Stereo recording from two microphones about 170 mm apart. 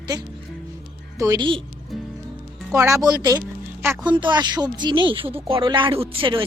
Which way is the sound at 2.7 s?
15° right (ahead or behind).